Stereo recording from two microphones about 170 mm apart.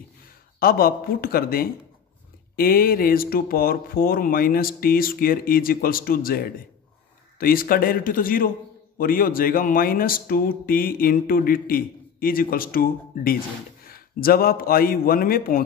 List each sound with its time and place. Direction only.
0.6 s speech: 60° left (ahead or behind)